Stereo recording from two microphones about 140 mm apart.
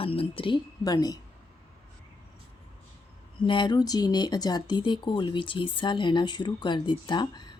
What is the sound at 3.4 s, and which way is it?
Speech, 35° left (ahead or behind).